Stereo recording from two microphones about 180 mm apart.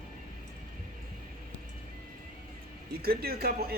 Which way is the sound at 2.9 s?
55° right (ahead or behind).